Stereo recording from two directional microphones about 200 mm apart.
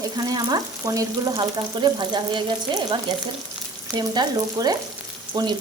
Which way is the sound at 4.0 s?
20° right (ahead or behind).